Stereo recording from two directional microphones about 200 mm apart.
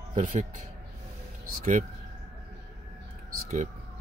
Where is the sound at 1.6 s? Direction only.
40° right (ahead or behind).